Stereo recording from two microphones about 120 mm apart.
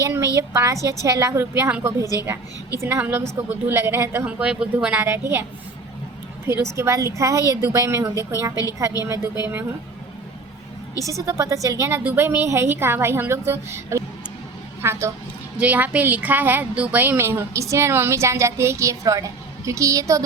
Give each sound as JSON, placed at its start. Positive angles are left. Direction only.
{"t": 0.0, "sound": "a woman's voice", "side_deg": -25}
{"t": 4.4, "sound": "a woman's voice", "side_deg": -10}
{"t": 11.0, "sound": "a woman's voice", "side_deg": -25}